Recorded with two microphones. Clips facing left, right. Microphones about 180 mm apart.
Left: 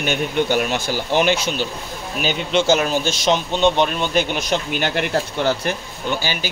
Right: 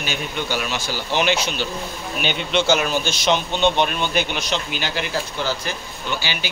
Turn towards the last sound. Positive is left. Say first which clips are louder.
# left 3 dB
turn(degrees=45)  # may be behind; listen again after turning